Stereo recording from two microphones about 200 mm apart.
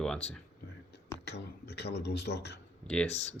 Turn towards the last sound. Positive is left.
turn(degrees=5)  # may be behind; listen again after turning